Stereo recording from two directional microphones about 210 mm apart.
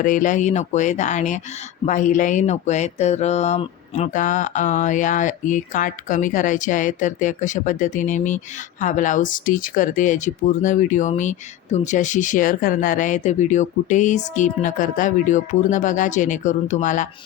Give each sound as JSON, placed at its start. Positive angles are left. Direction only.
{"t": 0.0, "sound": "speech", "side_deg": 40}